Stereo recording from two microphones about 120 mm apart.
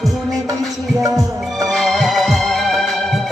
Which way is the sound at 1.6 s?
Centre (ahead or behind).